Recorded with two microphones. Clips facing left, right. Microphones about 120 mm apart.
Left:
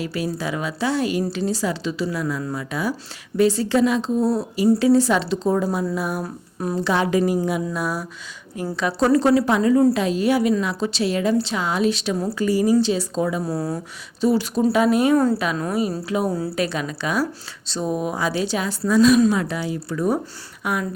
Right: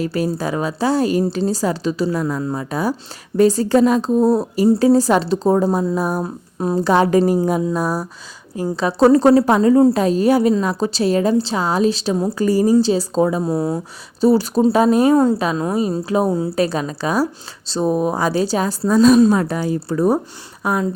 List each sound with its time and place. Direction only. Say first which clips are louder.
0.0 s a woman's voice: right 5 dB; 45° right (ahead or behind)
6.2 s speech: right 5 dB; 25° right (ahead or behind)
6.7 s a woman's voice: right 6 dB; 40° right (ahead or behind)
13.4 s speech: right 5 dB; 20° right (ahead or behind)
14.2 s a woman's voice: right 5 dB; 35° right (ahead or behind)